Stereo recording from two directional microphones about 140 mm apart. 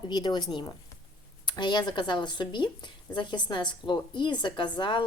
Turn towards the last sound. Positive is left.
turn(degrees=30)  # may be behind; listen again after turning